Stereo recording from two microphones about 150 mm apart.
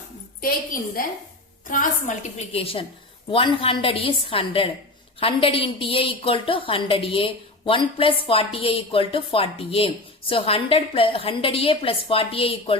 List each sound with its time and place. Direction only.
0.4 s a woman's voice: 70° left (ahead or behind)
2.5 s a woman's voice: 40° left (ahead or behind)